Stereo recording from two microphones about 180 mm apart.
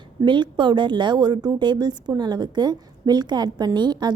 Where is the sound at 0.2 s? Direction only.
25° right (ahead or behind).